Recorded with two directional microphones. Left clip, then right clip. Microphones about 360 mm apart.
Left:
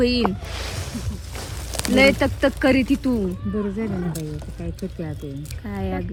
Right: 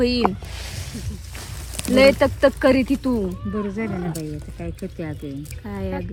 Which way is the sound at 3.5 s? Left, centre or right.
Right.